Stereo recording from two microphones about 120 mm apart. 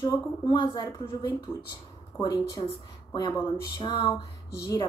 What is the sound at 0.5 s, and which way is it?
Speech, 40° left (ahead or behind).